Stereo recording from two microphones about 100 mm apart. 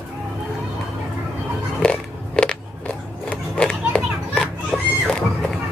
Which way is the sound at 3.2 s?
10° left (ahead or behind).